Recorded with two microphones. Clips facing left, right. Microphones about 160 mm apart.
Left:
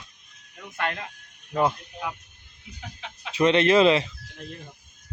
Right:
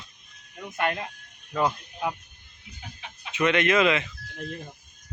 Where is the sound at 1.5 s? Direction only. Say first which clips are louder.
Left 2 dB; 25° left (ahead or behind).